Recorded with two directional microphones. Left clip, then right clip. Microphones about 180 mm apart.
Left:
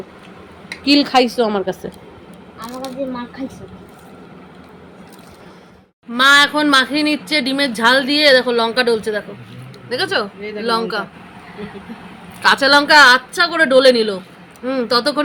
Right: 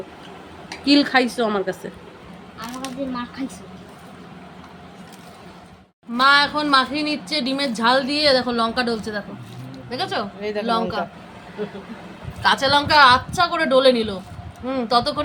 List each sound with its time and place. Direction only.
0.9 s a woman's voice: 5° left (ahead or behind)
6.1 s speech: 30° left (ahead or behind)
12.4 s speech: 25° left (ahead or behind)